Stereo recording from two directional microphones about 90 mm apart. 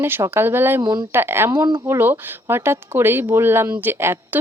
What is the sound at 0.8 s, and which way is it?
Speech, 50° right (ahead or behind).